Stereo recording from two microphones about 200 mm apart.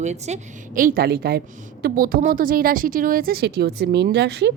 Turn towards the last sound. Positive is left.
turn(degrees=-55)  # may be behind; listen again after turning